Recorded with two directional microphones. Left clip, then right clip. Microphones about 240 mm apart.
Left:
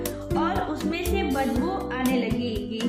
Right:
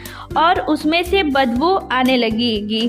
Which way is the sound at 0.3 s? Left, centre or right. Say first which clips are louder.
Right 12 dB; right.